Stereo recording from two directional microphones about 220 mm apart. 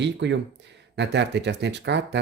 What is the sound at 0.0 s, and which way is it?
Speech, 55° right (ahead or behind).